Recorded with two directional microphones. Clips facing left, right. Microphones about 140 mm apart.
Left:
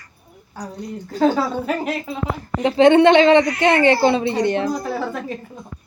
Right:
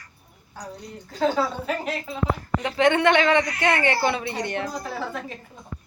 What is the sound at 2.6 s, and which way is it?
Speech, 30° left (ahead or behind).